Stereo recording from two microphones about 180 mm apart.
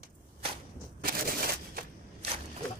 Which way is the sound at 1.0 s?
55° right (ahead or behind).